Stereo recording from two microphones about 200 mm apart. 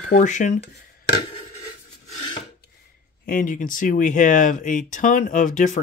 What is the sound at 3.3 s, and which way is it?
Speech, 45° left (ahead or behind).